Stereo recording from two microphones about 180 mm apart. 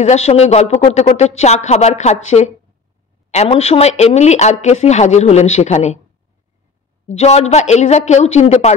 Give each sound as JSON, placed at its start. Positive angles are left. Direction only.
{"t": 0.0, "sound": "speech", "side_deg": 40}
{"t": 7.1, "sound": "speech", "side_deg": 40}